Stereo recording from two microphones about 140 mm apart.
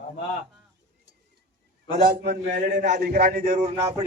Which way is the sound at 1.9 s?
75° right (ahead or behind).